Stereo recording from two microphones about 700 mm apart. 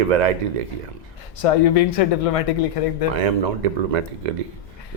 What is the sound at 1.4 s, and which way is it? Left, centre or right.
Speech, left.